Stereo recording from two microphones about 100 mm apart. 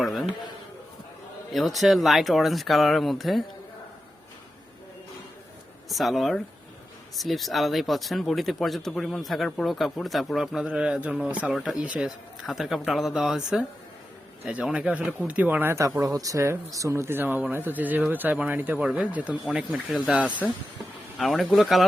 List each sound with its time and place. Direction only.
0.0 s a sound: centre (ahead or behind)
1.5 s speech: centre (ahead or behind)
5.9 s speech: centre (ahead or behind)
21.2 s speech: centre (ahead or behind)